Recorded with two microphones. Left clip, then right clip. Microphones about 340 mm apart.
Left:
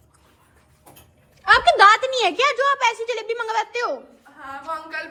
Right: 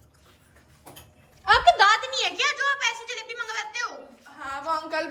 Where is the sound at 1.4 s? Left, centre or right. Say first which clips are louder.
Left 4 dB; left.